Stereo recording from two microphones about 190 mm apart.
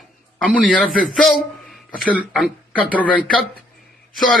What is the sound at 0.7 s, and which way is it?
A man's voice, centre (ahead or behind).